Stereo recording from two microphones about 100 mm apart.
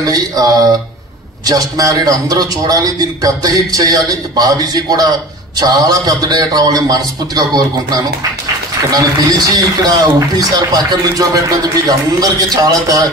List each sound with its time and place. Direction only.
0.0 s a man's voice: 40° right (ahead or behind)